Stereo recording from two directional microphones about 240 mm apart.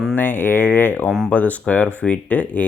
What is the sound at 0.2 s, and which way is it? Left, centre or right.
Speech, centre.